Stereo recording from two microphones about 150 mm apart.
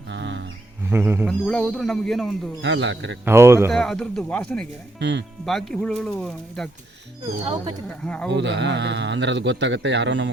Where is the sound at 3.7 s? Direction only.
5° left (ahead or behind).